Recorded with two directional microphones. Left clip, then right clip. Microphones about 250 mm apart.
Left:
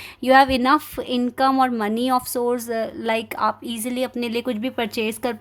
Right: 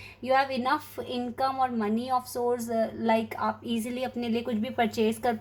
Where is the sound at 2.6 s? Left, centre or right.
Left.